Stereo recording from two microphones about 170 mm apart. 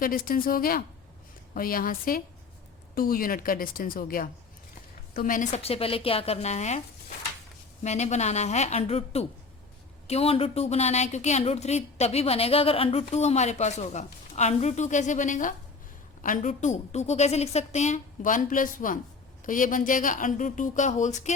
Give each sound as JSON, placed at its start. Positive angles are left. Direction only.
{"t": 0.0, "sound": "a woman's voice", "side_deg": 55}
{"t": 7.9, "sound": "a woman's voice", "side_deg": 40}